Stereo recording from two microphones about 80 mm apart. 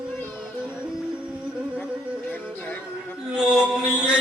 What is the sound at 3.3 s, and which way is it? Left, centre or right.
Chant, centre.